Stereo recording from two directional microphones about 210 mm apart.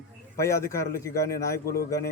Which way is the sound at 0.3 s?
15° left (ahead or behind).